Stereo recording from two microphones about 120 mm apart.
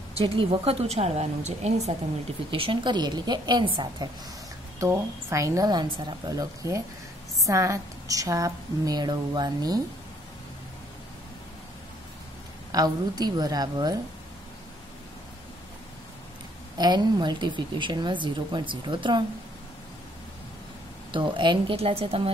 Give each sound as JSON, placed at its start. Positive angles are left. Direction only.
{"t": 0.1, "sound": "a woman's voice", "side_deg": -50}
{"t": 2.5, "sound": "a woman's voice", "side_deg": -45}
{"t": 4.7, "sound": "a woman's voice", "side_deg": -25}
{"t": 12.7, "sound": "a woman's voice", "side_deg": -35}
{"t": 16.7, "sound": "a woman's voice", "side_deg": -35}
{"t": 21.1, "sound": "a woman's voice", "side_deg": -45}